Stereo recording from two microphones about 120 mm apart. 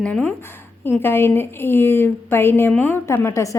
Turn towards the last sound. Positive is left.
turn(degrees=25)  # may be behind; listen again after turning